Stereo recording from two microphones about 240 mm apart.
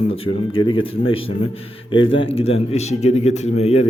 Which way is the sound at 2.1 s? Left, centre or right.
Left.